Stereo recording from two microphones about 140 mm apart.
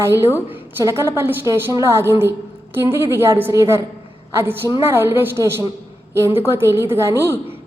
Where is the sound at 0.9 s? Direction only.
20° right (ahead or behind).